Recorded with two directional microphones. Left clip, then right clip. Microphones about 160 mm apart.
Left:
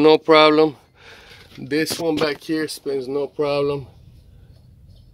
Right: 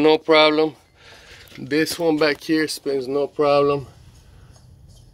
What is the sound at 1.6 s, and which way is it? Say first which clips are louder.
Speech: right 1 dB; 15° left (ahead or behind).